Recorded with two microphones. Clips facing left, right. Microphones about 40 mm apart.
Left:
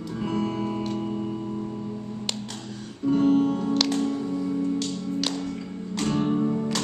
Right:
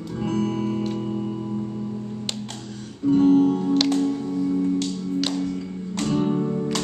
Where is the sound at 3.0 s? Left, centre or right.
Centre.